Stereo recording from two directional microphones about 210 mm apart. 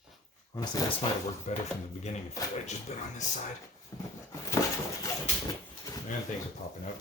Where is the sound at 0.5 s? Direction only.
15° left (ahead or behind).